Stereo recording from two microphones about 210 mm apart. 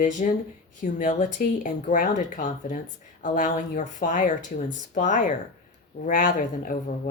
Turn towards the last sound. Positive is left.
turn(degrees=40)  # may be behind; listen again after turning